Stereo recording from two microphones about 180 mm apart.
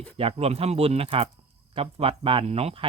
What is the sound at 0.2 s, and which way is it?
Speech, 35° right (ahead or behind).